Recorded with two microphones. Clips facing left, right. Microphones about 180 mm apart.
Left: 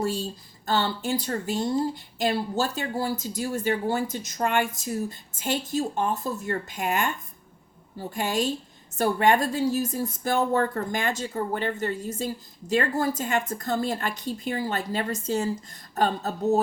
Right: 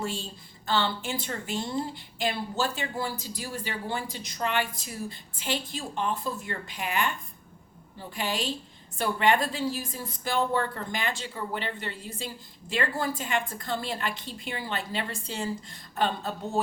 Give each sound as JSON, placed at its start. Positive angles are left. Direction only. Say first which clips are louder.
{"t": 0.0, "sound": "a woman's voice", "louder": "left 6 dB", "side_deg": 40}